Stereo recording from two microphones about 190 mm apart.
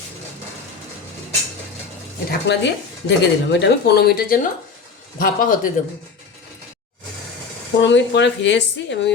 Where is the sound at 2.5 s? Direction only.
65° left (ahead or behind); by 5.7 s 45° left (ahead or behind).